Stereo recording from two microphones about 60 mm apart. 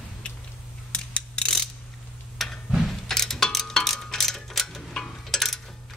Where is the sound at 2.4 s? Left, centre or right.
Centre.